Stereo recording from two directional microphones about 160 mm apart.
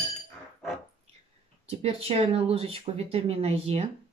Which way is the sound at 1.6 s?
35° right (ahead or behind).